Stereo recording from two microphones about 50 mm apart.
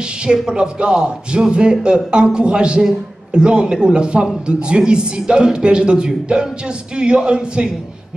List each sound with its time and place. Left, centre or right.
0.3 s a man's voice: centre